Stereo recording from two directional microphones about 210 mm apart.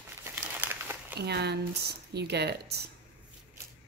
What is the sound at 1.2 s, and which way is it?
Speech, 50° right (ahead or behind).